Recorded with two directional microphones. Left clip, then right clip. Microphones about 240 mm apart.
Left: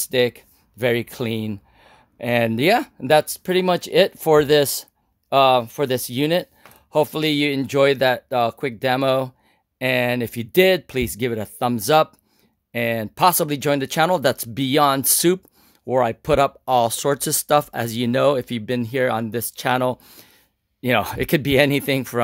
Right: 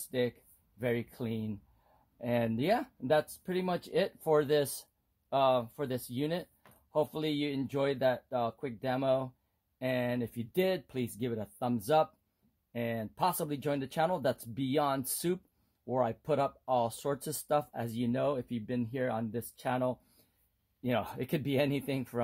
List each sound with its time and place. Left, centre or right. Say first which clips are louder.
0.1 s speech: left 14 dB; left